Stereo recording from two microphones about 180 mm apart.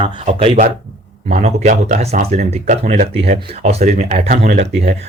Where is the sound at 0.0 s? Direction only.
30° right (ahead or behind).